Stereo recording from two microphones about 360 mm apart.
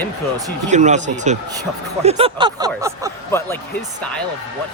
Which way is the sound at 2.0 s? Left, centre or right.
Centre.